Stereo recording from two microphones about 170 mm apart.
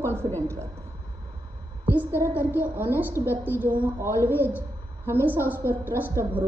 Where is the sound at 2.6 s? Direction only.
10° right (ahead or behind).